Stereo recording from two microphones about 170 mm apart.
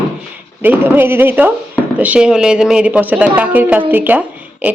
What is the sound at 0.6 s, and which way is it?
Speech, 10° right (ahead or behind).